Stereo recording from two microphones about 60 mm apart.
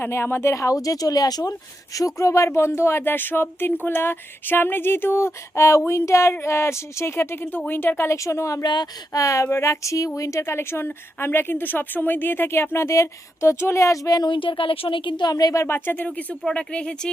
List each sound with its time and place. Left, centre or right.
0.0 s speech: left
0.5 s a woman's voice: left
3.0 s a sound: left
6.4 s speech: left
15.3 s speech: left
15.6 s a sound: left
16.0 s speech: left